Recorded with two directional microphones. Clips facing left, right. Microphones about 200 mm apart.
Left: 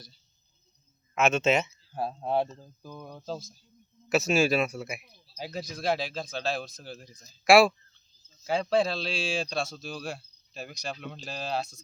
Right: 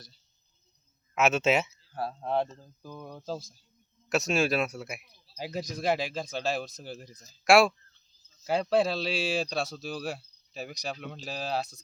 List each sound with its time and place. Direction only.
1.1 s speech: 5° right (ahead or behind)
1.9 s speech: 20° left (ahead or behind)
2.8 s speech: 5° right (ahead or behind)
5.8 s a man's voice: 10° right (ahead or behind)
7.1 s speech: 40° right (ahead or behind)
7.4 s a man's voice: centre (ahead or behind)
9.7 s cricket: 5° right (ahead or behind)
11.0 s speech: 5° right (ahead or behind)